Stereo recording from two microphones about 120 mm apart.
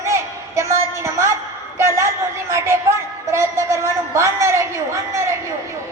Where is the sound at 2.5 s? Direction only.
20° right (ahead or behind).